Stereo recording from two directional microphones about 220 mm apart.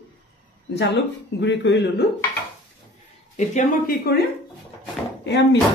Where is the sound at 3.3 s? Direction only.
35° left (ahead or behind).